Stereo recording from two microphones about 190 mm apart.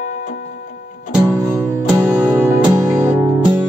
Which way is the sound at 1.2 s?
15° right (ahead or behind).